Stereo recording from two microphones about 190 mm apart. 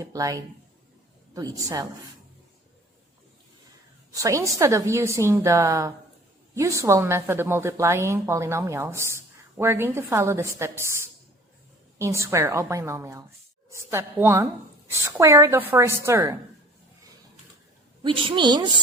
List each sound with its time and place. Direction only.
0.0 s a woman's voice: 15° right (ahead or behind)
4.1 s a woman's voice: 15° right (ahead or behind)
18.0 s speech: 30° right (ahead or behind)